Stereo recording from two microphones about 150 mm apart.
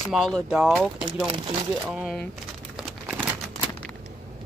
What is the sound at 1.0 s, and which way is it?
Speech, 35° right (ahead or behind).